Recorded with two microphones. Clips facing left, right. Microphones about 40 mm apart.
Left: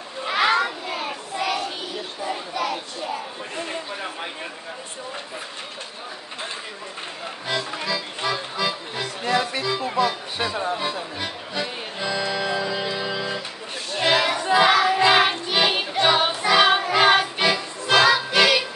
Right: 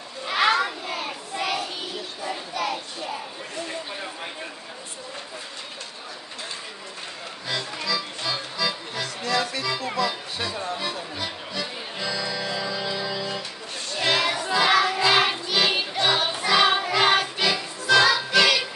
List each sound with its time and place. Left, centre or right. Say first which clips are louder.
0.3 s child singing: left 1 dB; centre
3.5 s a sound: left 2 dB; left
7.8 s music: left 2 dB; left
14.0 s music: left 3 dB; centre
14.4 s child singing: left 5 dB; left
14.7 s child singing: left 2 dB; centre
15.0 s music: left 3 dB; left; by 17.3 s centre
17.8 s music: left 1 dB; left